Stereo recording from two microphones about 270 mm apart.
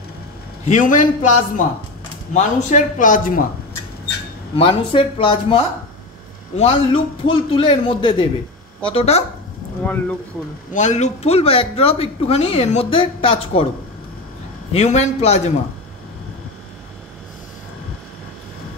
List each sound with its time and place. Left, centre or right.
0.7 s speech: left
4.6 s speech: centre
9.8 s speech: centre
10.7 s speech: left
14.7 s speech: left